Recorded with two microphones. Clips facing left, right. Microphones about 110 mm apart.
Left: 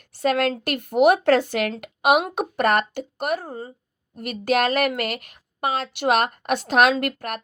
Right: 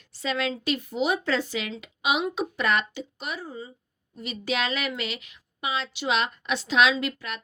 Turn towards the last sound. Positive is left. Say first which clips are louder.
# left 5 dB
turn(degrees=50)  # may be behind; listen again after turning